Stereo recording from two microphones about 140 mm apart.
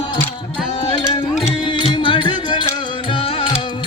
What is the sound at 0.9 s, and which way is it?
Music, 30° left (ahead or behind).